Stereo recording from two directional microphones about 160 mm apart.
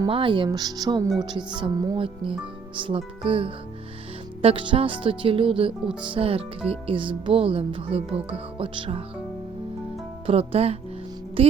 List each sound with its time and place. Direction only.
0.1 s speech: 30° right (ahead or behind)
2.7 s speech: 35° right (ahead or behind)
10.2 s speech: 35° right (ahead or behind)